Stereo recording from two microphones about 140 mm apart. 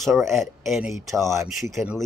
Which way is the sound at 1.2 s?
20° right (ahead or behind).